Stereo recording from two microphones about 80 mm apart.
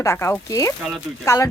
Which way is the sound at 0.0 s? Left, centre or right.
Left.